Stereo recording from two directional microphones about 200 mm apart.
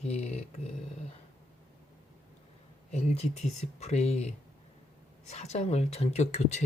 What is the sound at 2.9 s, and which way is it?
Speech, 35° left (ahead or behind).